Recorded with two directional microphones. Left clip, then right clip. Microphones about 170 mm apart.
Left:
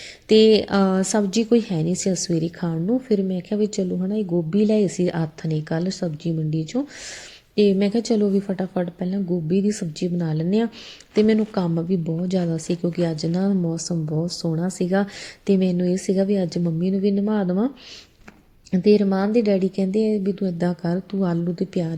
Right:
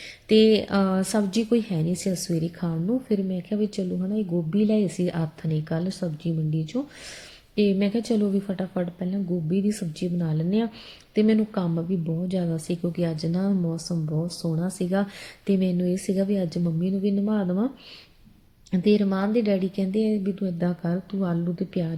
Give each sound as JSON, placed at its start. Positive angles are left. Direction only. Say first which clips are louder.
{"t": 0.3, "sound": "a woman's voice", "louder": "left 4 dB", "side_deg": 10}
{"t": 18.7, "sound": "a woman's voice", "louder": "left 5 dB", "side_deg": 5}